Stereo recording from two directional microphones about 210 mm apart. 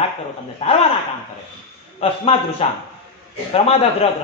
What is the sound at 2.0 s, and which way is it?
A man's voice, 25° left (ahead or behind).